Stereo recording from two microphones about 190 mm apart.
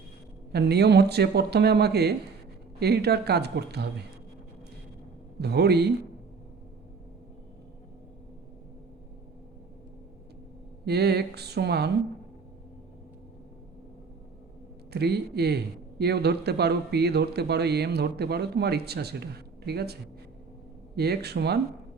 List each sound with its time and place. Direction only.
0.5 s speech: 60° right (ahead or behind)
5.4 s speech: 60° right (ahead or behind)
10.8 s speech: 60° right (ahead or behind)
14.9 s speech: 60° right (ahead or behind)